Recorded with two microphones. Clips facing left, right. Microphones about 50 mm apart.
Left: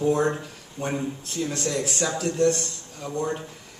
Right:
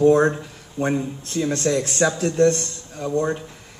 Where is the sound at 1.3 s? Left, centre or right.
Right.